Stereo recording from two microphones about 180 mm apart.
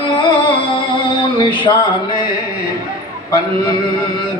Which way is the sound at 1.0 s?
25° left (ahead or behind).